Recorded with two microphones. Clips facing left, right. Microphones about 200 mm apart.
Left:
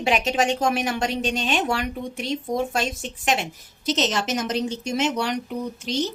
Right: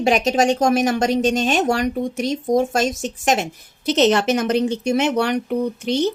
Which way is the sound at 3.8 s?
60° right (ahead or behind).